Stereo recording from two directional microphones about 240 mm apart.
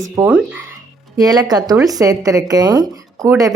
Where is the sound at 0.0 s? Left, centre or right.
Centre.